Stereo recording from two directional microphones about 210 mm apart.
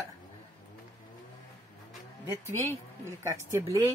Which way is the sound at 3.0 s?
15° right (ahead or behind).